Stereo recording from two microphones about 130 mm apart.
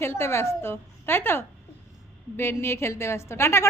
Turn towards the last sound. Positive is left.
turn(degrees=20)  # may be behind; listen again after turning